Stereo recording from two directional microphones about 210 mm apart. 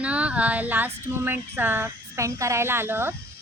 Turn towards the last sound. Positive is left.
turn(degrees=-10)  # may be behind; listen again after turning